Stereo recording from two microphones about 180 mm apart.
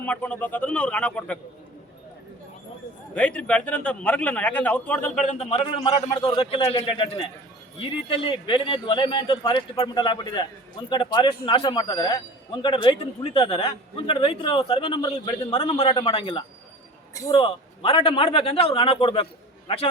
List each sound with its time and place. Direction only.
0.0 s a man's voice: 10° left (ahead or behind)
3.2 s a man's voice: 5° left (ahead or behind)
5.2 s a man's voice: 40° left (ahead or behind)